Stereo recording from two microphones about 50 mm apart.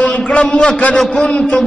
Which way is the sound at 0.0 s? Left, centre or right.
Centre.